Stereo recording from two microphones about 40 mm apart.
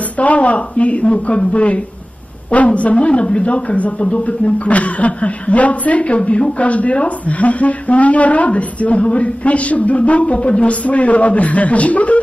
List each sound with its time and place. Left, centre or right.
0.2 s a woman's voice: left